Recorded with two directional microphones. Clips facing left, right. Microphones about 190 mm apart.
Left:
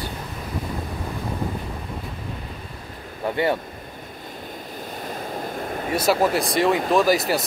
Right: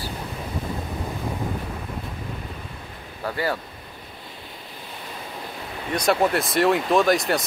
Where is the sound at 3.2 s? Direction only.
25° left (ahead or behind).